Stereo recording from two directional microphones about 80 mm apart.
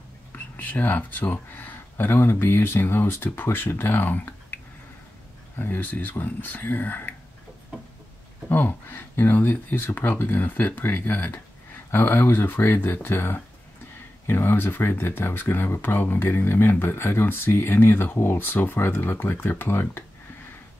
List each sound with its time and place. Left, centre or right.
0.3 s speech: left
5.6 s speech: left
8.5 s speech: left